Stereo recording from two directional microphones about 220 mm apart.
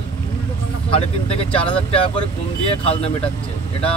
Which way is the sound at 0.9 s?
25° left (ahead or behind).